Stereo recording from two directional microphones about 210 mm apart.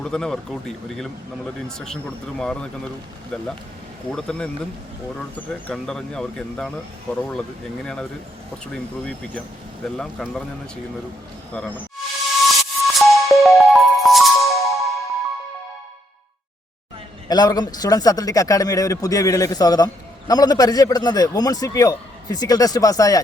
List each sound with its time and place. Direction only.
0.0 s speech: 5° left (ahead or behind)
2.4 s speech: 5° left (ahead or behind)
4.1 s speech: 5° left (ahead or behind)
5.5 s speech: 5° left (ahead or behind)
8.6 s speech: 5° left (ahead or behind)
12.5 s music: centre (ahead or behind)
17.2 s speech: 20° left (ahead or behind)